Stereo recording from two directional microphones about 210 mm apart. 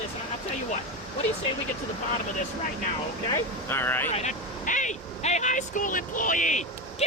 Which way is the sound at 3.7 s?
10° left (ahead or behind).